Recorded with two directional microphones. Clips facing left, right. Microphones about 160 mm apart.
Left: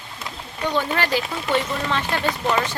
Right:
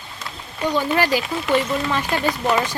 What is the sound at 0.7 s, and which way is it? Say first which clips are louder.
Speech: right 3 dB; 10° right (ahead or behind).